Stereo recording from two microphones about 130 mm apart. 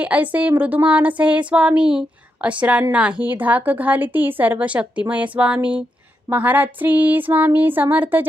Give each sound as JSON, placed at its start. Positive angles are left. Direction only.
{"t": 0.0, "sound": "a woman's voice", "side_deg": -10}